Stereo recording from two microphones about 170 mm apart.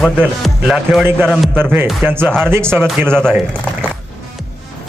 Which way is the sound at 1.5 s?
10° right (ahead or behind).